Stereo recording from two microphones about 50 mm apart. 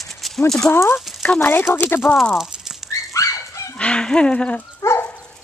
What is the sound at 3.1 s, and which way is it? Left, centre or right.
Dog, left.